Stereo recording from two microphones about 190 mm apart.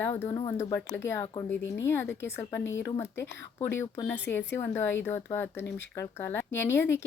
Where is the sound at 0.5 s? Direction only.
15° left (ahead or behind).